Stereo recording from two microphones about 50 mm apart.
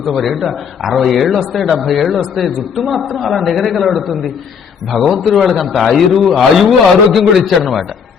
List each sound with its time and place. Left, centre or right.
0.0 s a man's voice: centre